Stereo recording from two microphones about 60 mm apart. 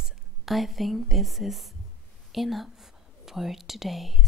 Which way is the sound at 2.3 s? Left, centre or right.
Centre.